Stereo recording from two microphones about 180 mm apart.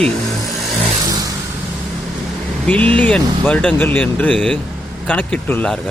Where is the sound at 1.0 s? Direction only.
20° right (ahead or behind).